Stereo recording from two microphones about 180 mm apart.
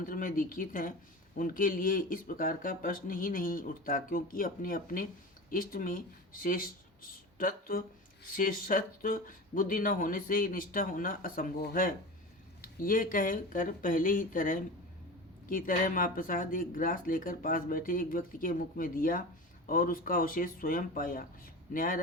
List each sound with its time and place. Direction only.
0.0 s speech: 50° left (ahead or behind)